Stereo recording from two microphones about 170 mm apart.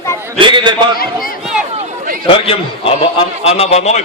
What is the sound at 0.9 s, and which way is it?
Speech, 55° left (ahead or behind).